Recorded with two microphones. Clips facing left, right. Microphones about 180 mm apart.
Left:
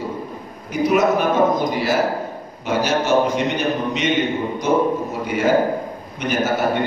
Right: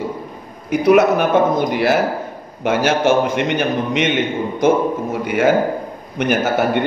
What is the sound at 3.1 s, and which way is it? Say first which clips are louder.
A man's voice: right 2 dB; 50° right (ahead or behind).